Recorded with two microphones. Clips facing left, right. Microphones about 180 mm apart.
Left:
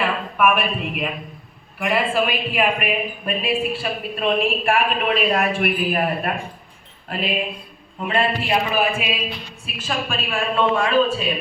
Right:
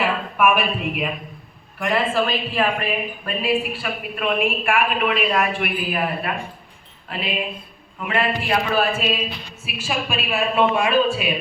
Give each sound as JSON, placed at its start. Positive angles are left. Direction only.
{"t": 0.0, "sound": "a woman's voice", "side_deg": -5}
{"t": 1.8, "sound": "a woman's voice", "side_deg": 10}
{"t": 7.9, "sound": "a man's voice", "side_deg": 30}
{"t": 8.4, "sound": "music", "side_deg": 15}
{"t": 9.6, "sound": "a man's voice", "side_deg": -10}